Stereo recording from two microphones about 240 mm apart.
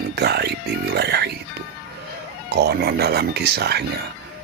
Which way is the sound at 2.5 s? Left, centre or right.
Right.